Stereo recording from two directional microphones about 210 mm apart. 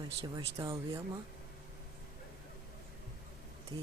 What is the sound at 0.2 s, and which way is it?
Speech, 20° right (ahead or behind).